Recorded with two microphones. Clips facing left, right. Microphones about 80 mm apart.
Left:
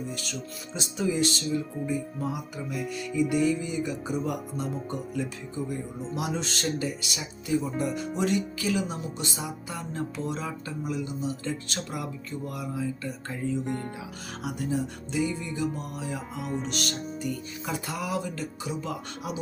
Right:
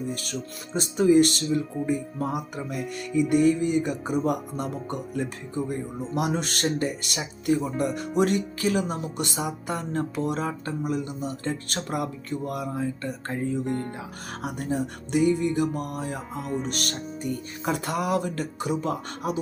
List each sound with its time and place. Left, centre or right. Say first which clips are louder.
0.1 s music: right 3 dB; right
16.3 s music: right 3 dB; centre
16.6 s music: right 1 dB; right